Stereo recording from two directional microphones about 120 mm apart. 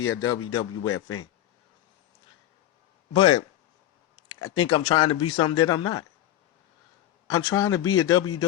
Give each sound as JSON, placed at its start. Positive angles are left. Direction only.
{"t": 0.0, "sound": "speech", "side_deg": 30}
{"t": 3.1, "sound": "speech", "side_deg": 40}
{"t": 7.3, "sound": "speech", "side_deg": 30}